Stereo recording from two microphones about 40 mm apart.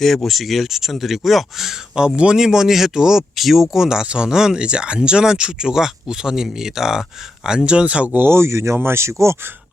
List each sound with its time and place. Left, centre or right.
0.0 s speech: centre
2.0 s speech: right
8.1 s speech: right